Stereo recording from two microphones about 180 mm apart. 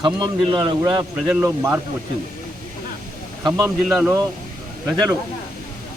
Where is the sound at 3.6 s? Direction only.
10° right (ahead or behind).